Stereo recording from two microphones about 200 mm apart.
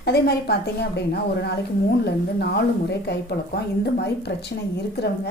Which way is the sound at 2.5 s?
55° left (ahead or behind).